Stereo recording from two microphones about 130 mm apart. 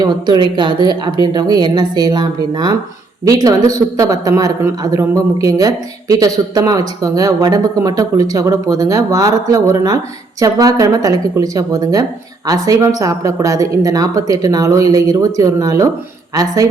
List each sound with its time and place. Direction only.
0.0 s speech: 35° right (ahead or behind)